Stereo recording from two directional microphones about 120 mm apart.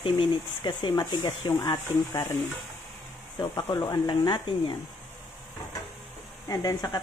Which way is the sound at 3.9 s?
40° left (ahead or behind).